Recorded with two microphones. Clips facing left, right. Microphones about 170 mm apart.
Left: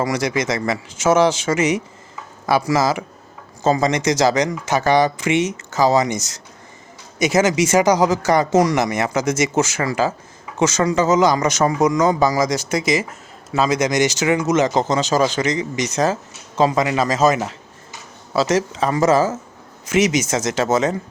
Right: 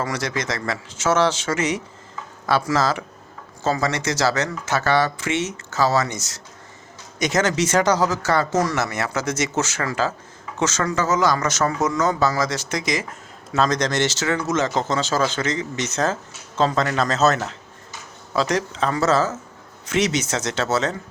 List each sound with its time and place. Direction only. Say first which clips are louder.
0.0 s a man's voice: left 5 dB; 10° left (ahead or behind)